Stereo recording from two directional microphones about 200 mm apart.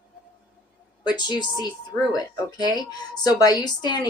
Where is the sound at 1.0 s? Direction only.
20° left (ahead or behind).